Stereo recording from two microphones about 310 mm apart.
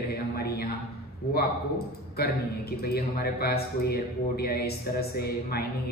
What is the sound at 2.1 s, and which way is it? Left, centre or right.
A man's voice, left.